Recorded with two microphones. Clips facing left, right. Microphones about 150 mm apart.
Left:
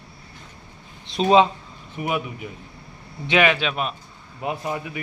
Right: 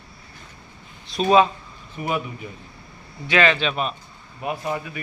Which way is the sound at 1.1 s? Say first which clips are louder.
Left 1 dB; 25° left (ahead or behind).